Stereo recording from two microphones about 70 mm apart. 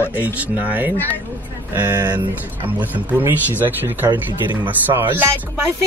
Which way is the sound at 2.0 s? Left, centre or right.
Right.